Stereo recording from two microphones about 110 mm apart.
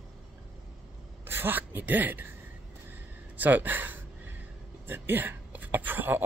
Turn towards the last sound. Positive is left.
turn(degrees=-20)  # may be behind; listen again after turning